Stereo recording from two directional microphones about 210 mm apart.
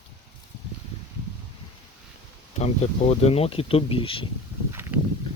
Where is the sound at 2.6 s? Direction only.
30° left (ahead or behind).